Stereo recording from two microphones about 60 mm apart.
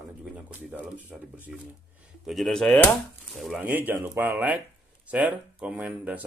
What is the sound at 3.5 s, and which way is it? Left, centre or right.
Speech, right.